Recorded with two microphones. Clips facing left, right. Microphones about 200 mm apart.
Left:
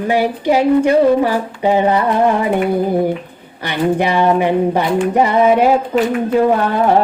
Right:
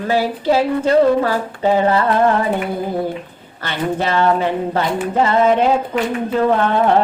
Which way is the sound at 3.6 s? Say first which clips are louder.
Left 4 dB; 15° left (ahead or behind).